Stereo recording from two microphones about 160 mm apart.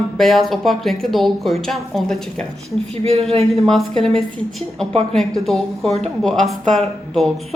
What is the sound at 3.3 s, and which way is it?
Speech, 40° right (ahead or behind).